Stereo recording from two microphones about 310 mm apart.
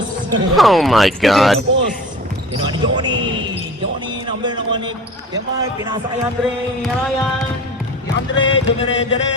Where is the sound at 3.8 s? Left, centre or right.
Centre.